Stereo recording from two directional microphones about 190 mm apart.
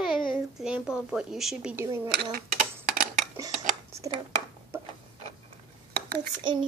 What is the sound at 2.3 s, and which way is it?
Dishes, 50° right (ahead or behind).